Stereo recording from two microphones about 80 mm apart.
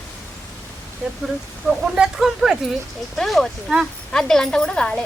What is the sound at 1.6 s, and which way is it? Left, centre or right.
A woman's voice, centre.